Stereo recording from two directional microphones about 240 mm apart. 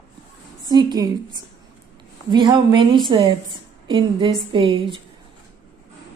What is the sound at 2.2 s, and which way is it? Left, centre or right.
A woman's voice, centre.